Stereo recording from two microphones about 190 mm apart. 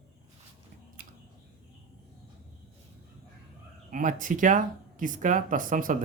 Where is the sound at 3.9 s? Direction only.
45° right (ahead or behind).